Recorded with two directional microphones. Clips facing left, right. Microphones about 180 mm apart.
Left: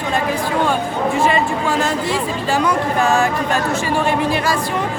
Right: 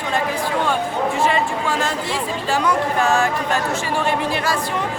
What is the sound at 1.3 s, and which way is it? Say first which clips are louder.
Speech: left 3 dB; 10° left (ahead or behind).